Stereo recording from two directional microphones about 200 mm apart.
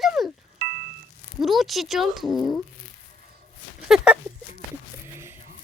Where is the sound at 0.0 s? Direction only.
Centre (ahead or behind).